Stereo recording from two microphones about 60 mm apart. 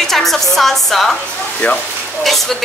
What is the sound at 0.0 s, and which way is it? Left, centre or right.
Speech, centre.